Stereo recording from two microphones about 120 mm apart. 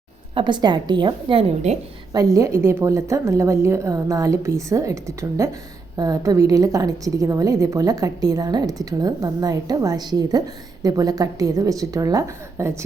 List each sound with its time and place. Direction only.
0.3 s a woman's voice: 40° right (ahead or behind); by 1.8 s 60° right (ahead or behind)
2.1 s a woman's voice: 25° right (ahead or behind)